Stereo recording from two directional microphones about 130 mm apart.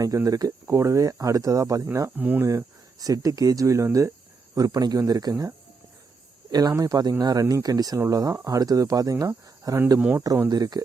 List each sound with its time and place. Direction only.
0.0 s speech: 25° right (ahead or behind)
2.1 s speech: 15° right (ahead or behind)
2.5 s speech: 25° right (ahead or behind)
10.5 s speech: 30° right (ahead or behind)